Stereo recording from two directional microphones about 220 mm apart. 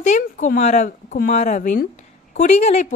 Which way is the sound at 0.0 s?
35° left (ahead or behind).